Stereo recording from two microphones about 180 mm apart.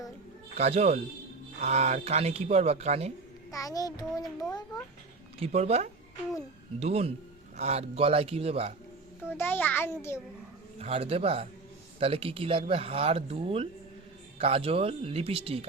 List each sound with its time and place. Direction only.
0.5 s speech: 35° right (ahead or behind)
3.5 s a child's voice: 20° left (ahead or behind)
5.4 s speech: 35° right (ahead or behind)
9.3 s a child's voice: 10° left (ahead or behind)
10.8 s speech: 35° right (ahead or behind)